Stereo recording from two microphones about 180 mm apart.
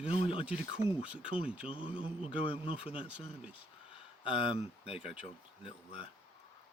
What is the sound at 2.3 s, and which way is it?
Speech, 30° left (ahead or behind).